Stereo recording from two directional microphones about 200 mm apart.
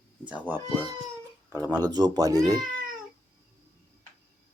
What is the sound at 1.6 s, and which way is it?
Speech, 20° right (ahead or behind).